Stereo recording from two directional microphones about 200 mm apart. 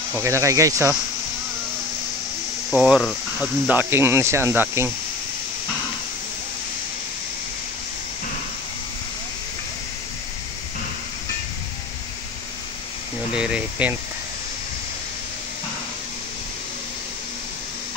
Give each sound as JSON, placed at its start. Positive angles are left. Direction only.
{"t": 0.1, "sound": "speech", "side_deg": -15}
{"t": 2.7, "sound": "speech", "side_deg": 0}
{"t": 13.3, "sound": "speech", "side_deg": -5}